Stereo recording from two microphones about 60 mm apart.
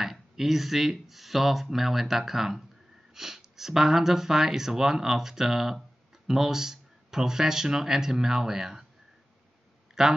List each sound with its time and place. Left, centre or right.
0.0 s speech: centre
10.0 s speech: centre